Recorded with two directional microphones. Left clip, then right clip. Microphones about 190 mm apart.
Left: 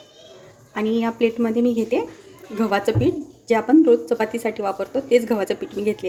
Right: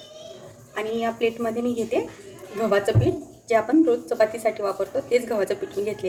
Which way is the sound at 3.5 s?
45° left (ahead or behind).